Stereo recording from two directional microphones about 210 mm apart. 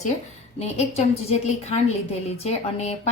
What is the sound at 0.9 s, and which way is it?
A woman's voice, 30° left (ahead or behind).